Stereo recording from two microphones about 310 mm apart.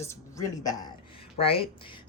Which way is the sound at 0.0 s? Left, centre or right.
Centre.